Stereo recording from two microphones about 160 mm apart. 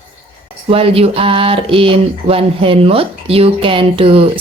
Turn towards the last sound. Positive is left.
turn(degrees=-35)  # may be behind; listen again after turning